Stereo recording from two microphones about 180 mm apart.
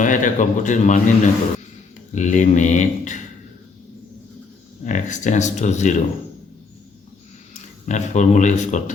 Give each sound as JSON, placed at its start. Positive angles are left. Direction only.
{"t": 0.0, "sound": "a man's voice", "side_deg": 45}
{"t": 4.9, "sound": "speech", "side_deg": 40}
{"t": 7.9, "sound": "speech", "side_deg": 40}